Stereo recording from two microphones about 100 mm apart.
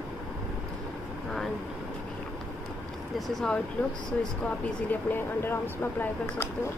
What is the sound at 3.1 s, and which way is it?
Speech, 5° left (ahead or behind).